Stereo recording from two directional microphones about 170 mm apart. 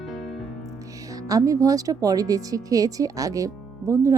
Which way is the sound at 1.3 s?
20° right (ahead or behind).